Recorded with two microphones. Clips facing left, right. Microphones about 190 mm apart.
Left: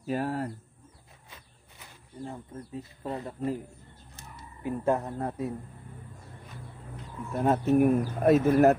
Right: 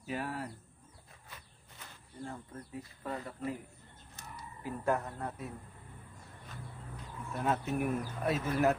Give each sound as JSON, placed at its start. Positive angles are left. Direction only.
{"t": 0.0, "sound": "speech", "side_deg": 40}
{"t": 1.8, "sound": "speech", "side_deg": 20}
{"t": 7.3, "sound": "speech", "side_deg": 40}